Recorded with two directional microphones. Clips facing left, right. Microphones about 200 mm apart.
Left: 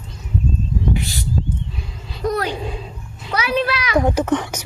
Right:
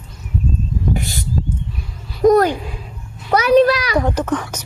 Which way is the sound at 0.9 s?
45° right (ahead or behind).